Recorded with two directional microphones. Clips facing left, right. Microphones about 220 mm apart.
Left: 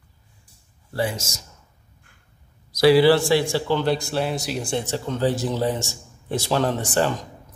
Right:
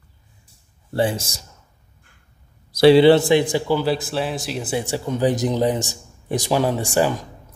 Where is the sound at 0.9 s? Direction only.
30° right (ahead or behind).